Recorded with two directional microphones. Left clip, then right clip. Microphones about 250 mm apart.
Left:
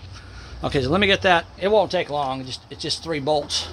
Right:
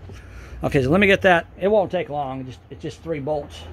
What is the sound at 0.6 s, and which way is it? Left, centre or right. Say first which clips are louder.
Speech: right 2 dB; right.